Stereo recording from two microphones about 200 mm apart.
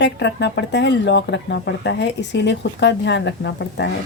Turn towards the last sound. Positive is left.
turn(degrees=60)  # may be behind; listen again after turning